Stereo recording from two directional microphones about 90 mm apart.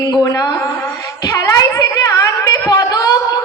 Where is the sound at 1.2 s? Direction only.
40° left (ahead or behind).